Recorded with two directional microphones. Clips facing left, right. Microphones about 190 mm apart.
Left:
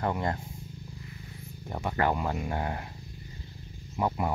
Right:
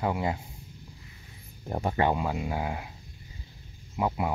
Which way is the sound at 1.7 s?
35° right (ahead or behind).